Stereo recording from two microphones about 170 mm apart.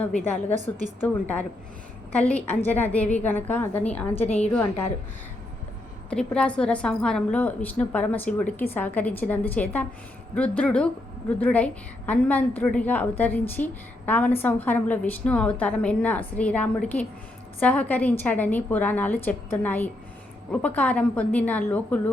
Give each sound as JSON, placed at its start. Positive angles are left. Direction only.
{"t": 1.0, "sound": "a woman's voice", "side_deg": 10}
{"t": 4.3, "sound": "a woman's voice", "side_deg": 40}
{"t": 6.1, "sound": "a woman's voice", "side_deg": 5}